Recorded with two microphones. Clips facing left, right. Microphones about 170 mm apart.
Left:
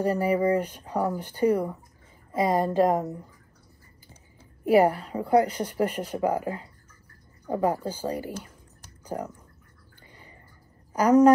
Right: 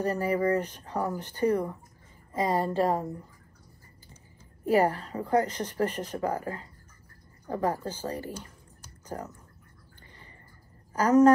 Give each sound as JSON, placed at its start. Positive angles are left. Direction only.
{"t": 0.0, "sound": "a woman's voice", "side_deg": 10}
{"t": 4.6, "sound": "a woman's voice", "side_deg": 10}
{"t": 10.9, "sound": "speech", "side_deg": 10}